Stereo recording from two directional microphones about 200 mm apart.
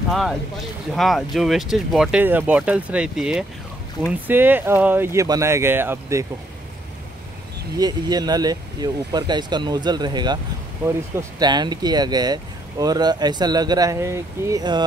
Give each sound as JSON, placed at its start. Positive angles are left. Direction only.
{"t": 0.1, "sound": "speech", "side_deg": 0}
{"t": 7.7, "sound": "speech", "side_deg": -20}